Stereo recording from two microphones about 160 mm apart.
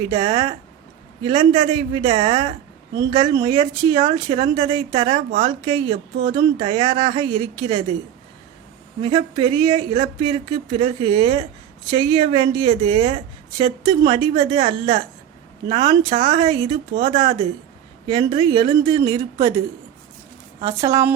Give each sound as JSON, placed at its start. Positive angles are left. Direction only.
{"t": 0.1, "sound": "speech", "side_deg": -25}
{"t": 9.0, "sound": "speech", "side_deg": -30}
{"t": 20.7, "sound": "speech", "side_deg": -20}